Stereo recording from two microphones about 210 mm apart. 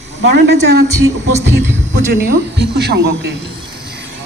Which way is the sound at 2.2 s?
50° right (ahead or behind).